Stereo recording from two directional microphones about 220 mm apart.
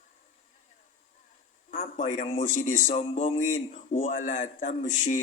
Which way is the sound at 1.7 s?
30° left (ahead or behind).